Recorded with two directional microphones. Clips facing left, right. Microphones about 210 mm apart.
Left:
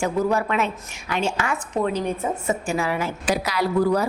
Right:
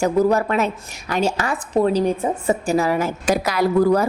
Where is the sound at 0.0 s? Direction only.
40° right (ahead or behind).